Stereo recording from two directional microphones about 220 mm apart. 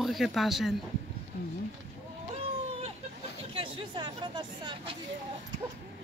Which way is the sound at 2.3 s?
25° right (ahead or behind).